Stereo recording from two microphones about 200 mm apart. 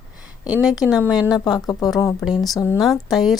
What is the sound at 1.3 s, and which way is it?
Speech, 20° left (ahead or behind).